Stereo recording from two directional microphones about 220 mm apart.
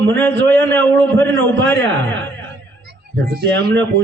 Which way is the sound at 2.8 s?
45° right (ahead or behind).